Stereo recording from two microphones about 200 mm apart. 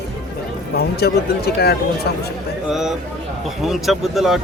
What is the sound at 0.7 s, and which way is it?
Speech, 50° left (ahead or behind).